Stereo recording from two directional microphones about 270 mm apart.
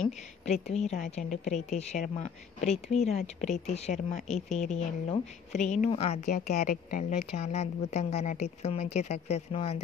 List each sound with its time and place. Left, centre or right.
0.5 s a woman's voice: left